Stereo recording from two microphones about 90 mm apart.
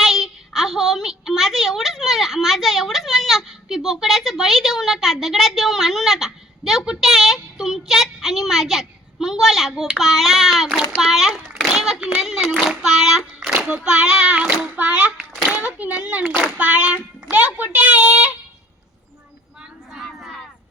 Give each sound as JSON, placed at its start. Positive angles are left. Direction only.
{"t": 0.0, "sound": "child singing", "side_deg": 0}
{"t": 11.0, "sound": "splash", "side_deg": -5}
{"t": 11.7, "sound": "child singing", "side_deg": -5}
{"t": 12.2, "sound": "a sound", "side_deg": -5}
{"t": 15.6, "sound": "child singing", "side_deg": -15}
{"t": 20.1, "sound": "a sound", "side_deg": 5}